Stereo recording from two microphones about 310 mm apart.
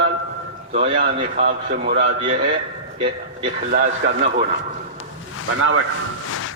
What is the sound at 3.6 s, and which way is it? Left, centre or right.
Speech, right.